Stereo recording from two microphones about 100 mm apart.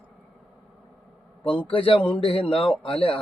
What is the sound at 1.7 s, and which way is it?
Speech, 60° left (ahead or behind).